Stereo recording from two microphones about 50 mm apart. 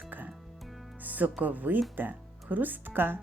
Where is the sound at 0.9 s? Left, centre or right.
Right.